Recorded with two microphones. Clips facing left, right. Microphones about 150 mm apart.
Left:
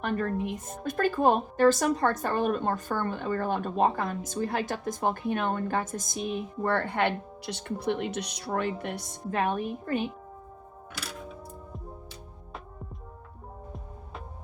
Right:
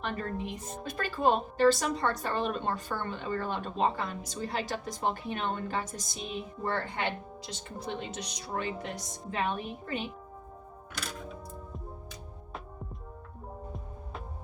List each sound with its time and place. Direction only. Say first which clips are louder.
0.0 s speech: left 6 dB; 55° left (ahead or behind)